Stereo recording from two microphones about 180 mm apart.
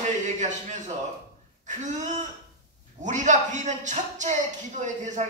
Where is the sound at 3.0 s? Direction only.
40° right (ahead or behind).